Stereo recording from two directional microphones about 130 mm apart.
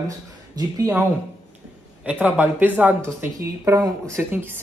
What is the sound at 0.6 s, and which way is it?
Speech, 30° right (ahead or behind).